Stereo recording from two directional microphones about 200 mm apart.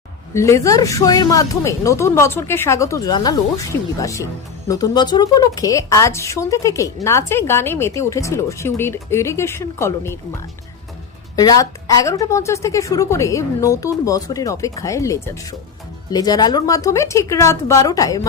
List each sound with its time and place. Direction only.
0.3 s speech: 15° left (ahead or behind)